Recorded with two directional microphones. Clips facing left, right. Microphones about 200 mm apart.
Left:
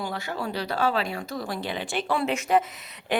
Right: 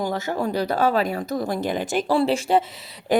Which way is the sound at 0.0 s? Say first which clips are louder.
Right 7 dB; 45° right (ahead or behind).